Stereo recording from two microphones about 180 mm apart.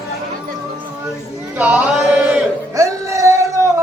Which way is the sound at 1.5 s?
10° right (ahead or behind).